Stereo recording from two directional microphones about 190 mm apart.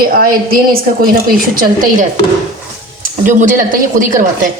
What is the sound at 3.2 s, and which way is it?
Speech, 45° right (ahead or behind).